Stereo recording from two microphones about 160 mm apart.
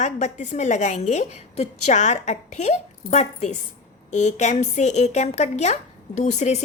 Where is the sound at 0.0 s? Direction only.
50° left (ahead or behind).